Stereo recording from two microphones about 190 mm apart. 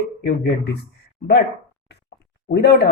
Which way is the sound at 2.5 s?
60° left (ahead or behind).